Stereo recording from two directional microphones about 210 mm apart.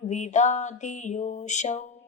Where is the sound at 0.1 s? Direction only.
35° left (ahead or behind).